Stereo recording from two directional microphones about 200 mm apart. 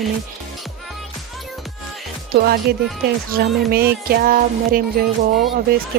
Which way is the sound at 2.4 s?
50° right (ahead or behind).